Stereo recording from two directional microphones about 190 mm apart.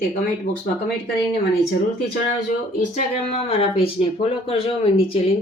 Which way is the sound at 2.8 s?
40° left (ahead or behind).